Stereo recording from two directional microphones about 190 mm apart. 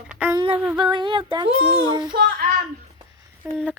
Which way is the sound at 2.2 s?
55° right (ahead or behind).